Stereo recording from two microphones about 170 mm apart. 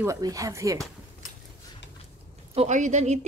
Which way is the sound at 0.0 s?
20° right (ahead or behind).